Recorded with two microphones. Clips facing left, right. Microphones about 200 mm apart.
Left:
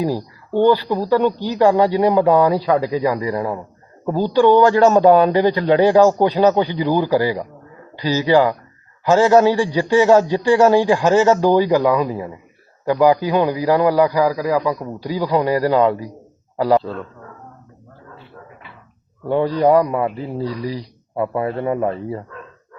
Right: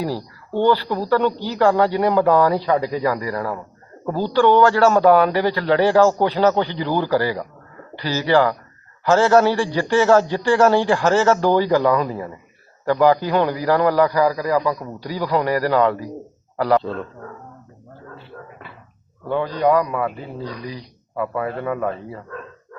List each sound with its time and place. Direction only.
0.0 s a man's voice: 15° left (ahead or behind)
16.8 s a man's voice: centre (ahead or behind)
19.3 s a man's voice: 30° left (ahead or behind)